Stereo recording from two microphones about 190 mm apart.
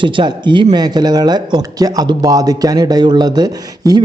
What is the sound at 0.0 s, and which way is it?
Speech, 25° right (ahead or behind).